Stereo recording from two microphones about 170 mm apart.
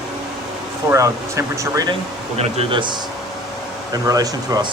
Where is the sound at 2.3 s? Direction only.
35° right (ahead or behind).